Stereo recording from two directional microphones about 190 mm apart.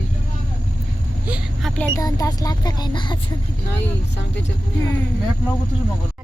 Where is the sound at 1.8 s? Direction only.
20° left (ahead or behind).